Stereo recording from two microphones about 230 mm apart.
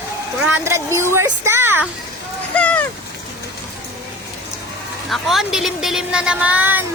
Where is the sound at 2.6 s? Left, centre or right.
Centre.